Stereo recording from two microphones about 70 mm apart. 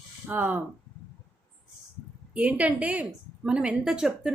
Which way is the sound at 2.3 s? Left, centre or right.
Centre.